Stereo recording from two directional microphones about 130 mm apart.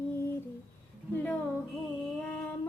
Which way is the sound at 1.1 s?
15° left (ahead or behind).